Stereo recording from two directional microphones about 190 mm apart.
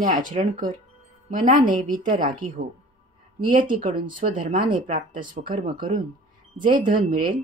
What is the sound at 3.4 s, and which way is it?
A woman's voice, 45° right (ahead or behind).